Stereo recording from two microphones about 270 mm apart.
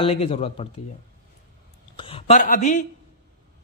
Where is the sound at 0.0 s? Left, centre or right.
Left.